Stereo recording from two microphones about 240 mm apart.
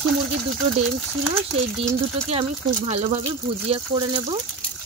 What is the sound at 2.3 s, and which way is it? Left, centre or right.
A woman's voice, right.